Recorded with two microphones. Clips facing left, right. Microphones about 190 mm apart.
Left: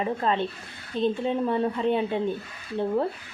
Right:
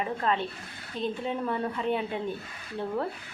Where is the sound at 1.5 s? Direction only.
25° left (ahead or behind).